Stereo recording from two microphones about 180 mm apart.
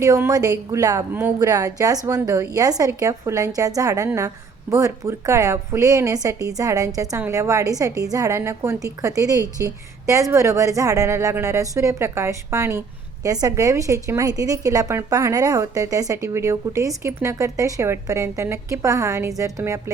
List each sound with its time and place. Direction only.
0.0 s a woman's voice: 20° right (ahead or behind)